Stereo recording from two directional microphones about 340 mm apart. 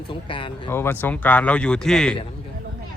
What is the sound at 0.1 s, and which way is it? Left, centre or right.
Speech, centre.